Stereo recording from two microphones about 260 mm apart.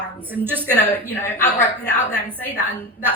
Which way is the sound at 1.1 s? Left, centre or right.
Centre.